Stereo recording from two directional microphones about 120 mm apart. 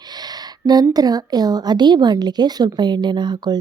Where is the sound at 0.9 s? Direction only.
35° right (ahead or behind).